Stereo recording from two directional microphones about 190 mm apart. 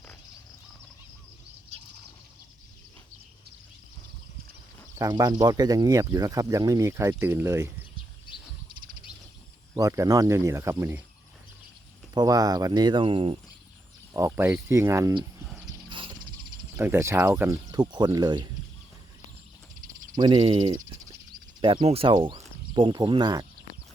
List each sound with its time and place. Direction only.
4.9 s speech: 20° right (ahead or behind)
9.7 s speech: 15° right (ahead or behind)
12.1 s speech: 20° right (ahead or behind)
14.1 s speech: 15° right (ahead or behind)
15.6 s horse: 25° right (ahead or behind)
16.7 s speech: 10° right (ahead or behind)
20.1 s speech: 25° right (ahead or behind)